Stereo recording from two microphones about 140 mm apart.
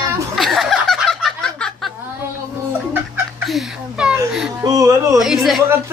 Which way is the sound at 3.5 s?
5° right (ahead or behind).